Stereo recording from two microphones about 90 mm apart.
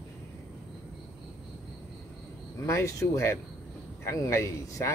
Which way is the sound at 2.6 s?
35° left (ahead or behind).